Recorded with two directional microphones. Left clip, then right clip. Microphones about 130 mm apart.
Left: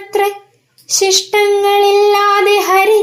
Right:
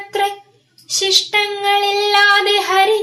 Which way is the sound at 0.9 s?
35° left (ahead or behind).